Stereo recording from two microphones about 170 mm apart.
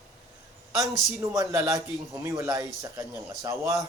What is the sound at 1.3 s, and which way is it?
A man's voice, 20° right (ahead or behind).